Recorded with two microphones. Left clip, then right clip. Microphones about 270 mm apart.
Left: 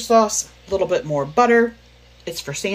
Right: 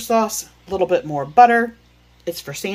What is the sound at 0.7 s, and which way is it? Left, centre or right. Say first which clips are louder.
Speech: right 2 dB; centre.